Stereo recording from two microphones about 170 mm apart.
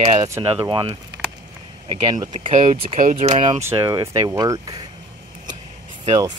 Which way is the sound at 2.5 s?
40° right (ahead or behind).